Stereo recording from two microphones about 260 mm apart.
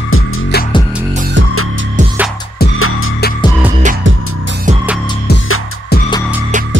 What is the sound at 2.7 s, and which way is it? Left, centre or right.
Music, left.